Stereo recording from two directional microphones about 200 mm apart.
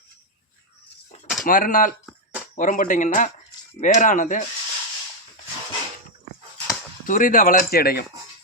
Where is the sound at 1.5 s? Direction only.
45° left (ahead or behind).